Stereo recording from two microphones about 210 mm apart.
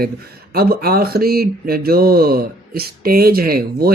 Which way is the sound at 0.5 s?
45° right (ahead or behind).